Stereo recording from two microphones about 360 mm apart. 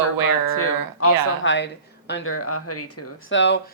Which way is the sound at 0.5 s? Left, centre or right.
Left.